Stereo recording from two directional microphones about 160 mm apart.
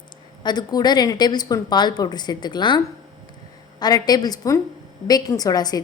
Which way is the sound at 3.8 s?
25° left (ahead or behind).